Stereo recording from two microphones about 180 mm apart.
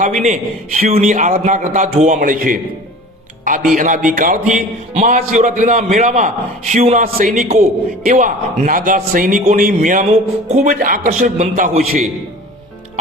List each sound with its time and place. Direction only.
0.3 s a man's voice: 45° right (ahead or behind)
3.8 s a man's voice: 45° right (ahead or behind)